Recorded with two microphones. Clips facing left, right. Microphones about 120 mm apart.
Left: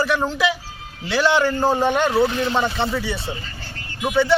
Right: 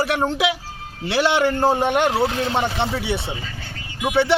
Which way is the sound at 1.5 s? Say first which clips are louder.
Right 1 dB; 65° right (ahead or behind).